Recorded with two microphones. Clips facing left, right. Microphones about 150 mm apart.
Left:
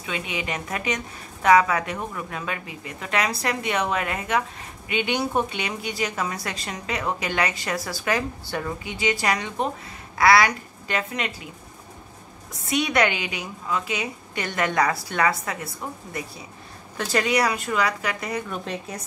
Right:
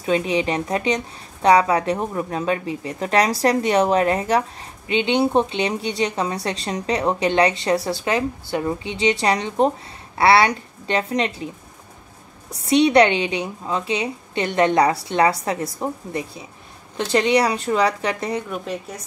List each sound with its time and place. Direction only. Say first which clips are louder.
0.0 s a woman's voice: right 10 dB; 35° right (ahead or behind)
12.6 s a woman's voice: right 8 dB; 30° right (ahead or behind)
18.5 s speech: right 3 dB; 5° right (ahead or behind)